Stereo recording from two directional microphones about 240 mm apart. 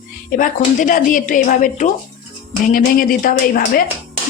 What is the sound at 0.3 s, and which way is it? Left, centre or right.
Cutlery, left.